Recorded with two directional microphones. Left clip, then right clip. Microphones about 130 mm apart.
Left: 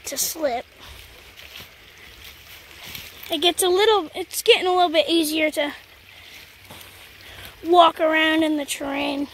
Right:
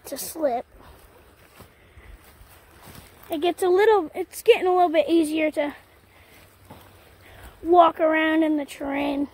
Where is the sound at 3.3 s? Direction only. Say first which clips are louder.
Left 4 dB; 5° left (ahead or behind).